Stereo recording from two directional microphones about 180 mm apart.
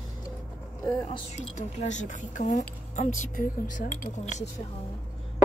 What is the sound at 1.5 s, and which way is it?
Speech, 40° left (ahead or behind).